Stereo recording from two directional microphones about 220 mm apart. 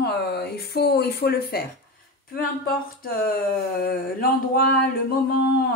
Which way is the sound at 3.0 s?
45° left (ahead or behind).